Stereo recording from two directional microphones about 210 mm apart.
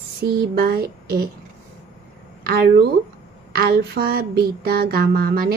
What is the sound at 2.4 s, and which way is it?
A woman's voice, 45° right (ahead or behind).